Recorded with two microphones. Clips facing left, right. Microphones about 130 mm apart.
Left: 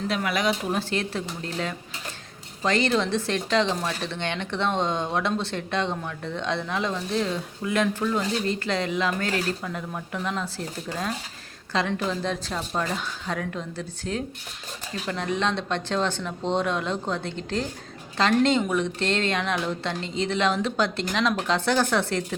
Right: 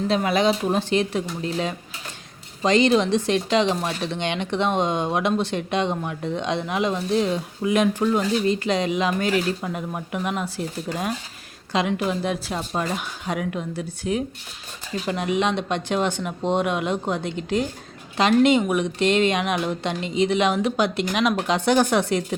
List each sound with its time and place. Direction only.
0.1 s speech: 25° right (ahead or behind)